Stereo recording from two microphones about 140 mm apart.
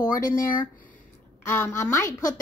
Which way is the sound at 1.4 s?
15° left (ahead or behind).